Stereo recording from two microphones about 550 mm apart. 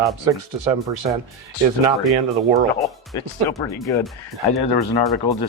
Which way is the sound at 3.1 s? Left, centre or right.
Centre.